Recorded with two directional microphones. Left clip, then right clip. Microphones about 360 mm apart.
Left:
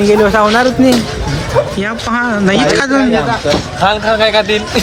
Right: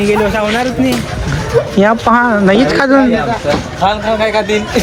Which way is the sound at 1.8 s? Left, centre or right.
Centre.